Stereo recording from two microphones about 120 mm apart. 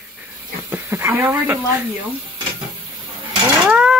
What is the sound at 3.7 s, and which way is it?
Livestock, 5° right (ahead or behind).